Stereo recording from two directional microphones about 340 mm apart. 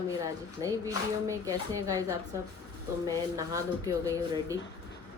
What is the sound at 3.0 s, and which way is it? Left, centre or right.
Speech, centre.